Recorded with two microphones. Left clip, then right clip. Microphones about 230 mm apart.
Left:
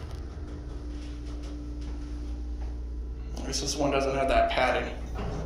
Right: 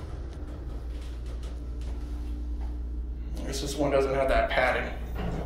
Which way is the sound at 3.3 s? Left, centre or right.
Centre.